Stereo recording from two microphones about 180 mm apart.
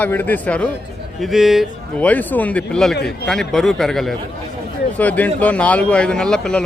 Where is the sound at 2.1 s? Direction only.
10° left (ahead or behind).